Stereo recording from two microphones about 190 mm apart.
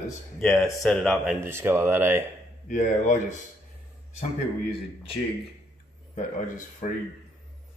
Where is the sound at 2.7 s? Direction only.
40° left (ahead or behind).